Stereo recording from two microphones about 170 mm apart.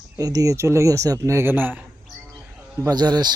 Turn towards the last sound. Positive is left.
turn(degrees=-25)  # may be behind; listen again after turning